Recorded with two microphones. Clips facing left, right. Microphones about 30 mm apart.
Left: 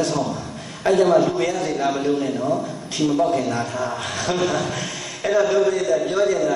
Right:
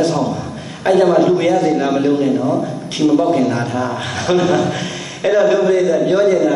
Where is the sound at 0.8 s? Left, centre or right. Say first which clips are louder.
Right 4 dB; right.